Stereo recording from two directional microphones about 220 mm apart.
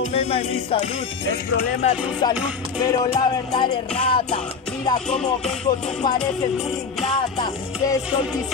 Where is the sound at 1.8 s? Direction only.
30° left (ahead or behind).